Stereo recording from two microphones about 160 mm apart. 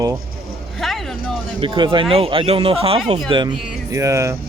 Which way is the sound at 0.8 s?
Centre (ahead or behind).